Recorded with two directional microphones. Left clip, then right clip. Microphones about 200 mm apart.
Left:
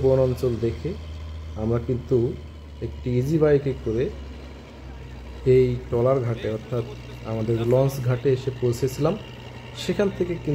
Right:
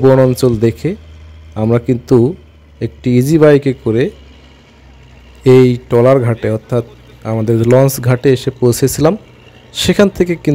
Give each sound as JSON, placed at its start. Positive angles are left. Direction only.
{"t": 0.1, "sound": "speech", "side_deg": -55}
{"t": 5.4, "sound": "speech", "side_deg": -55}